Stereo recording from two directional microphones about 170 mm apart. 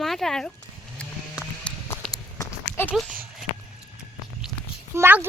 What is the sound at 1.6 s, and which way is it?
Run, 5° left (ahead or behind).